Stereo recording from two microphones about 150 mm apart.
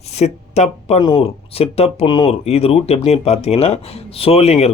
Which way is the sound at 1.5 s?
40° left (ahead or behind).